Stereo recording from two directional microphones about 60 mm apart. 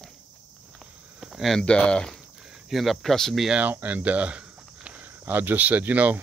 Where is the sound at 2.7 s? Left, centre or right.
Centre.